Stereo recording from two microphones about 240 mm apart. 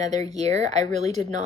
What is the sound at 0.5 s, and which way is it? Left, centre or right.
Speech, right.